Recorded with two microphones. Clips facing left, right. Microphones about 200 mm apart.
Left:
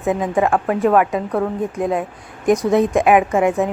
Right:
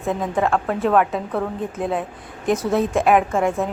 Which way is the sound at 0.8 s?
Centre (ahead or behind).